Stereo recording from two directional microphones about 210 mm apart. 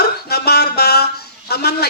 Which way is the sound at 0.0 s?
50° left (ahead or behind).